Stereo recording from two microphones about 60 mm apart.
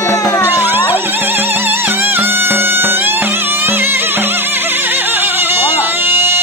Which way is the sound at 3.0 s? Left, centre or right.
Right.